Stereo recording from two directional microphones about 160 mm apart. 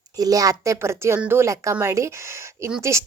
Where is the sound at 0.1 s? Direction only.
25° right (ahead or behind).